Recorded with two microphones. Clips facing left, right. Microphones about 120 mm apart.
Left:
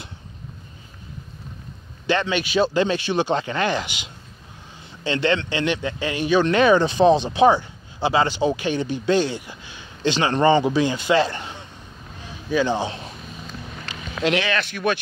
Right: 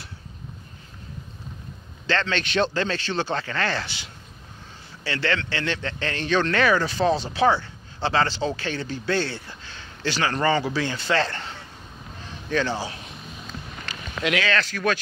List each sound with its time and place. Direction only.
2.0 s a man's voice: 15° left (ahead or behind)
12.7 s speech: 25° left (ahead or behind)
14.2 s speech: 25° left (ahead or behind)